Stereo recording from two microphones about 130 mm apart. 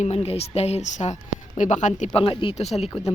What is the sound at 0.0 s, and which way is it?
Speech, 55° left (ahead or behind).